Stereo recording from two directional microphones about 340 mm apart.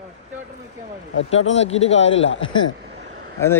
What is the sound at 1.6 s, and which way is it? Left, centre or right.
Speech, centre.